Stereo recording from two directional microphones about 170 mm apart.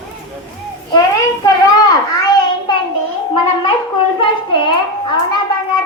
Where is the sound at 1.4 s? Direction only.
20° left (ahead or behind).